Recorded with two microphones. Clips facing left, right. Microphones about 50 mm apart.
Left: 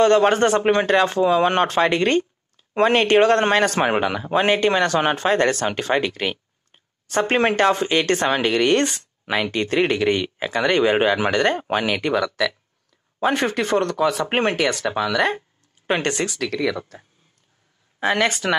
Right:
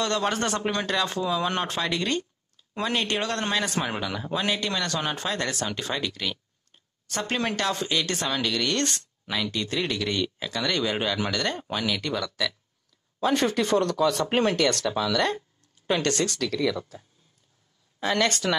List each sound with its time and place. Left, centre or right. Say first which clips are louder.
0.0 s a man's voice: left 11 dB; left
12.4 s speech: left 7 dB; centre
13.2 s speech: left 3 dB; centre
14.2 s speech: left 3 dB; left
14.6 s speech: left 2 dB; centre
14.9 s speech: left 4 dB; left
16.3 s speech: left 3 dB; centre
17.9 s speech: left 5 dB; left